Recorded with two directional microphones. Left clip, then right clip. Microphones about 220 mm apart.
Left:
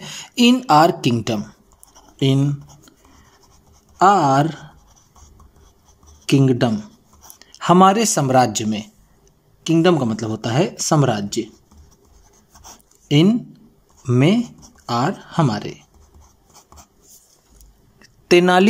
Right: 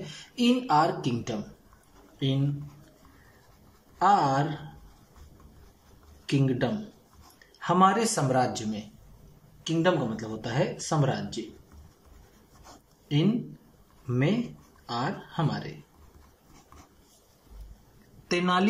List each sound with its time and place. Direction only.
0.0 s speech: 45° left (ahead or behind)
4.0 s speech: 50° left (ahead or behind)
6.2 s speech: 50° left (ahead or behind)
14.0 s speech: 50° left (ahead or behind)
18.3 s speech: 40° left (ahead or behind)